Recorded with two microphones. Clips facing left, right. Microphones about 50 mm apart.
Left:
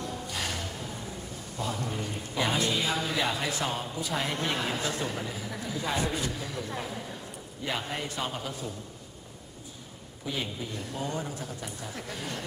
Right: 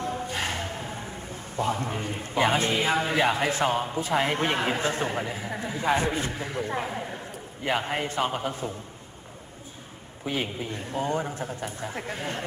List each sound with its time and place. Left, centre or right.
0.0 s a man's voice: right
10.2 s a man's voice: right